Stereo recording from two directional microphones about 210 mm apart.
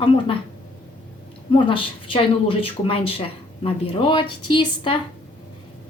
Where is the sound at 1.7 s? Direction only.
25° left (ahead or behind).